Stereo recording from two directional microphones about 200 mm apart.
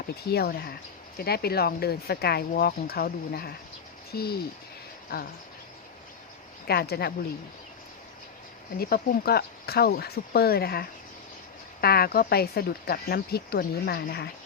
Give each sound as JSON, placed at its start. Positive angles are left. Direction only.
{"t": 0.3, "sound": "speech", "side_deg": 50}
{"t": 6.7, "sound": "speech", "side_deg": 50}
{"t": 8.8, "sound": "speech", "side_deg": 50}